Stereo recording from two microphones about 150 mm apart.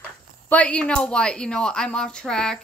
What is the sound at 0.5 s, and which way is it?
A woman's voice, 10° left (ahead or behind).